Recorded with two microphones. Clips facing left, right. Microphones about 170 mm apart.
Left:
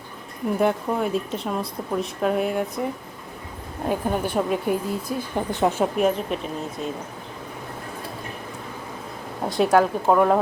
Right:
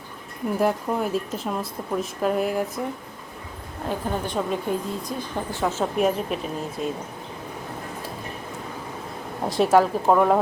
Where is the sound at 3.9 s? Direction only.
15° left (ahead or behind).